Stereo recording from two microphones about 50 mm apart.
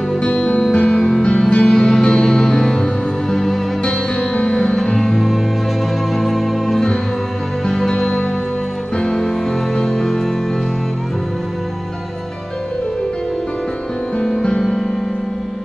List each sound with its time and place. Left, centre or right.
0.2 s music: left; by 3.5 s centre
3.8 s music: left
4.7 s music: centre
14.1 s music: centre